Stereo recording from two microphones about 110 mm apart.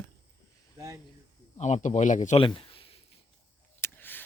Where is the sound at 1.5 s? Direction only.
90° left.